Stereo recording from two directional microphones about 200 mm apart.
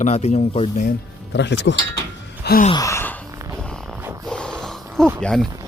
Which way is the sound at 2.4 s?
50° left (ahead or behind).